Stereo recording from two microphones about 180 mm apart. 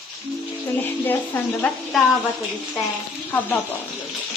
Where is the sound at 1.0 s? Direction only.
10° left (ahead or behind).